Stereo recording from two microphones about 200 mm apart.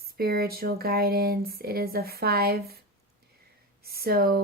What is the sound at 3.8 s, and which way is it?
Speech, 50° right (ahead or behind).